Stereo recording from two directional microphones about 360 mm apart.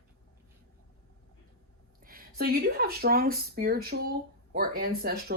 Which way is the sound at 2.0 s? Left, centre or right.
Right.